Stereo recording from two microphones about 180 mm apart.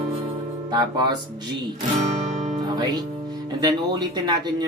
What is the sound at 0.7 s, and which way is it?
Speech, 25° right (ahead or behind).